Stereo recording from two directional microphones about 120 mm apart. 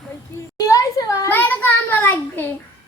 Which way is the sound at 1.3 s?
15° left (ahead or behind).